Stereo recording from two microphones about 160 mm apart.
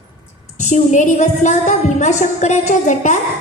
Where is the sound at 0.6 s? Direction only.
50° left (ahead or behind).